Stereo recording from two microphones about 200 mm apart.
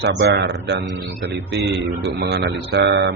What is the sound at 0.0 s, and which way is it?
A man's voice, 60° right (ahead or behind).